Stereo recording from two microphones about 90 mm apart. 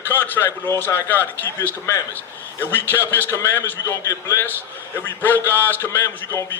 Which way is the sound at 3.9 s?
35° left (ahead or behind).